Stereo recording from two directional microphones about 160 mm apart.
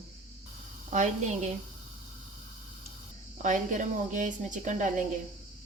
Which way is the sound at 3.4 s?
50° right (ahead or behind).